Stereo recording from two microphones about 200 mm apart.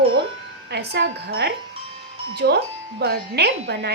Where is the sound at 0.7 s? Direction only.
55° right (ahead or behind).